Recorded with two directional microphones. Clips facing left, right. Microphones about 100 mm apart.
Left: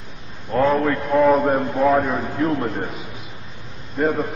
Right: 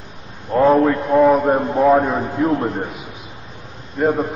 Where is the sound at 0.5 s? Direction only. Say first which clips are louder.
Right 5 dB; 20° right (ahead or behind).